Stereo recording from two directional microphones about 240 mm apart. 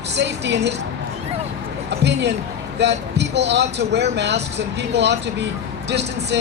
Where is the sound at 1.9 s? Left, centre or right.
Right.